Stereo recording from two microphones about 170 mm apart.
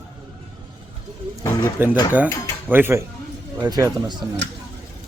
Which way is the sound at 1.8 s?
10° right (ahead or behind).